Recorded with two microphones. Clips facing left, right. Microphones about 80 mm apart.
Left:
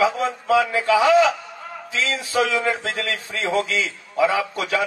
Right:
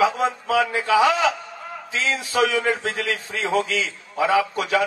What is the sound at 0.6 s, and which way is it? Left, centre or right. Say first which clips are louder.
A man's voice: right 3 dB; right.